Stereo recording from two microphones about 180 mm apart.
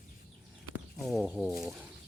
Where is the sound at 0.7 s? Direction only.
Centre (ahead or behind).